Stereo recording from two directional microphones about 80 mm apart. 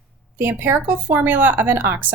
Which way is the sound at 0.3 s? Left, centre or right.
Right.